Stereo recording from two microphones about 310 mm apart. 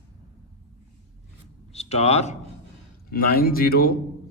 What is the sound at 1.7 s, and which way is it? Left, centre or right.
A man's voice, centre.